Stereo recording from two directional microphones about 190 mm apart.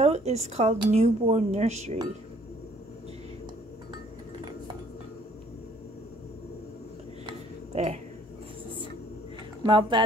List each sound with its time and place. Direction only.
0.0 s speech: 35° right (ahead or behind)
7.2 s a sound: 35° right (ahead or behind)
9.6 s speech: 25° right (ahead or behind)